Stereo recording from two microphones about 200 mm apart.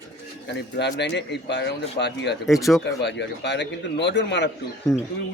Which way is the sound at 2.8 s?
60° left (ahead or behind).